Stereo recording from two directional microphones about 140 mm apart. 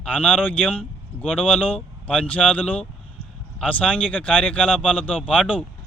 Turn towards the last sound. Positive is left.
turn(degrees=10)  # may be behind; listen again after turning